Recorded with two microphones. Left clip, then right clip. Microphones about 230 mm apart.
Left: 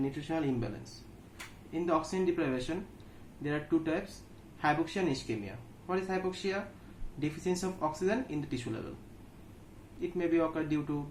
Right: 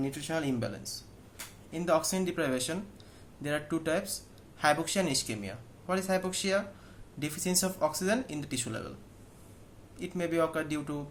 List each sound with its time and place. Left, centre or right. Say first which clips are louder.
0.0 s speech: right 1 dB; right
1.8 s speech: right 2 dB; right
10.2 s speech: right 1 dB; right